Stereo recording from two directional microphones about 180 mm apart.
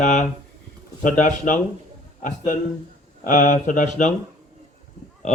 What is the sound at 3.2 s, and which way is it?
Speech, 45° left (ahead or behind).